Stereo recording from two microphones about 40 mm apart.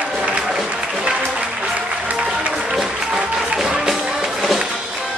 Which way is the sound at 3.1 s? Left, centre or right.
Centre.